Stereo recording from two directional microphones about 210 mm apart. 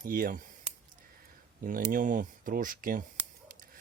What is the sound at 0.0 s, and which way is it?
Speech, 40° right (ahead or behind).